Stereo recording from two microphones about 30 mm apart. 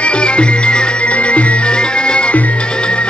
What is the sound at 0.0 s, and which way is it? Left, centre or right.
Music, left.